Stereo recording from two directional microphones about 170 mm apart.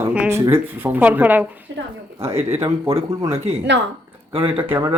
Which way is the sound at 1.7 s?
90° right.